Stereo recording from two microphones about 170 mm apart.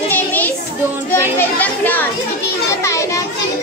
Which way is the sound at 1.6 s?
10° left (ahead or behind).